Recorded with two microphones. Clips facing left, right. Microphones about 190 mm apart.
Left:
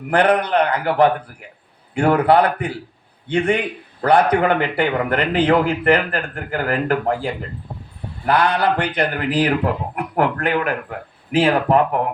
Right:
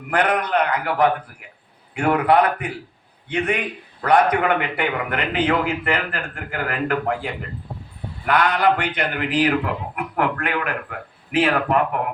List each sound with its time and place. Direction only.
0.1 s a man's voice: 30° left (ahead or behind)